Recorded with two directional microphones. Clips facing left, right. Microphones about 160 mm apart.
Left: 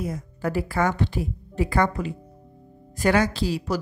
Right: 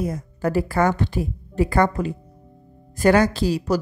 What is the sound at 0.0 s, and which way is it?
A woman's voice, 40° right (ahead or behind).